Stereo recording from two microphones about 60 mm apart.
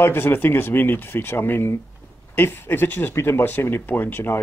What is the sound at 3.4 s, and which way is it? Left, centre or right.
Speech, left.